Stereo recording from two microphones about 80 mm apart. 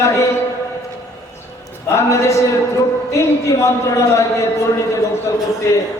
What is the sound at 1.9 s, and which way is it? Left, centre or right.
A man's voice, left.